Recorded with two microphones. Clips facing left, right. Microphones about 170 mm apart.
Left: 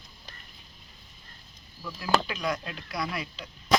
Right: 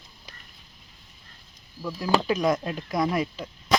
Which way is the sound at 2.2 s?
45° right (ahead or behind).